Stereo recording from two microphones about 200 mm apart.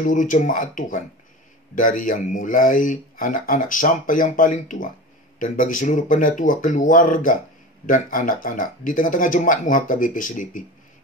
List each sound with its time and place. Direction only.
0.0 s a man's voice: 40° left (ahead or behind)